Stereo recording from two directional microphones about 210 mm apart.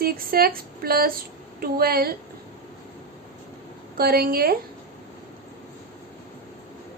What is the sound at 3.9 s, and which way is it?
Speech, 45° right (ahead or behind).